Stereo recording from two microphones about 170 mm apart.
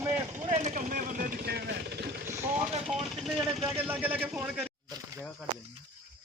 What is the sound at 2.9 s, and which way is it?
Speech, centre (ahead or behind).